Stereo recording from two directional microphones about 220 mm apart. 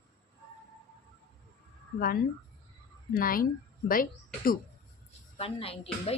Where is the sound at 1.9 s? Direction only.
45° left (ahead or behind).